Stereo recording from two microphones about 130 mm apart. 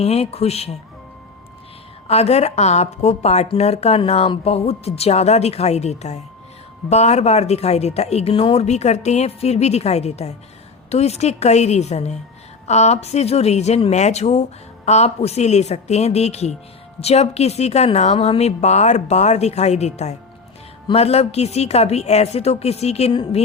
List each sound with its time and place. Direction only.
0.0 s speech: 50° left (ahead or behind)
2.0 s speech: 55° left (ahead or behind)